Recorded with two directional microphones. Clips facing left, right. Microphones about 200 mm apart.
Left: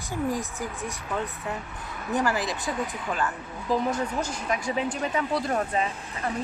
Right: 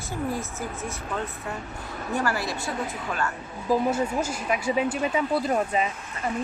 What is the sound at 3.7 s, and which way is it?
Speech, 10° right (ahead or behind).